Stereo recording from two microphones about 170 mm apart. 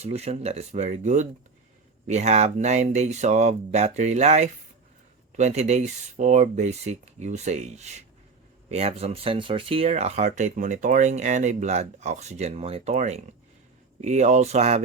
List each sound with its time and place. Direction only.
0.0 s speech: 40° right (ahead or behind)